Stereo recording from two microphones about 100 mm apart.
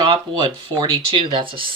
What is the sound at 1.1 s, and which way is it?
Speech, 60° right (ahead or behind).